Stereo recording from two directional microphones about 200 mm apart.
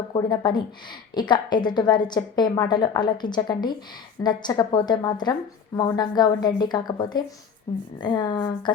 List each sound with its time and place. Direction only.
0.1 s a woman's voice: 20° left (ahead or behind)